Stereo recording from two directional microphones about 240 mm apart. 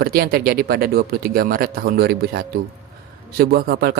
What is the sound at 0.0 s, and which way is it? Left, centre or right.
A man's voice, right.